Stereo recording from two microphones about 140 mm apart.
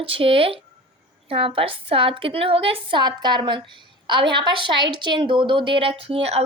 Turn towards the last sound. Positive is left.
turn(degrees=-45)  # may be behind; listen again after turning